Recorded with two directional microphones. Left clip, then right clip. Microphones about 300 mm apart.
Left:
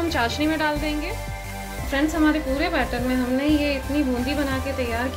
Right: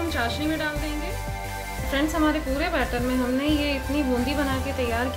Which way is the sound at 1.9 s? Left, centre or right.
Centre.